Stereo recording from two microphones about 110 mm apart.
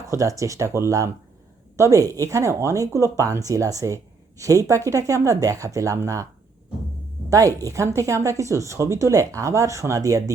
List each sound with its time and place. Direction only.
0.1 s speech: 30° right (ahead or behind)
7.3 s speech: 30° right (ahead or behind)